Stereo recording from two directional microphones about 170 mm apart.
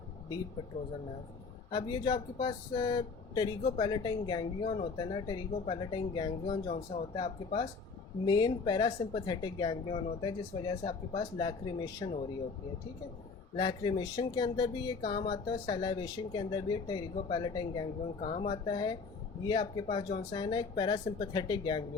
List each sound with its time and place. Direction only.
1.7 s speech: 25° left (ahead or behind)
6.7 s speech: 40° left (ahead or behind)
7.1 s speech: 25° left (ahead or behind)
13.6 s speech: 25° left (ahead or behind)
18.2 s speech: 35° left (ahead or behind)